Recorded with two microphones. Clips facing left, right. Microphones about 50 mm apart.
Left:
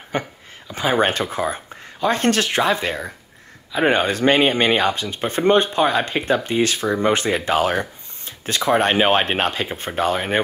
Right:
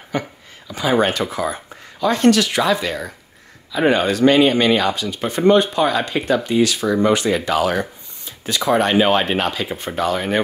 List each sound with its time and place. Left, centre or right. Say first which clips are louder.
0.1 s speech: right 1 dB; left